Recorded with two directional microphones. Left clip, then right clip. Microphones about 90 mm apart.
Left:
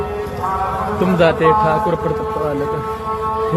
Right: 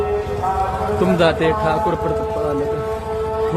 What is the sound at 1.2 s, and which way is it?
Speech, centre (ahead or behind).